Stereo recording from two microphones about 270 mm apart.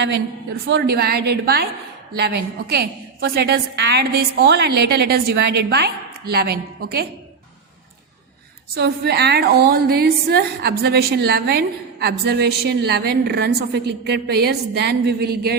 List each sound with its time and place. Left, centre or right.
0.7 s a woman's voice: right
8.7 s a woman's voice: right